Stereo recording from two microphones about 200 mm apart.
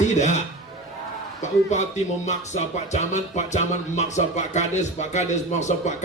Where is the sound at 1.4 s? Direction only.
35° left (ahead or behind).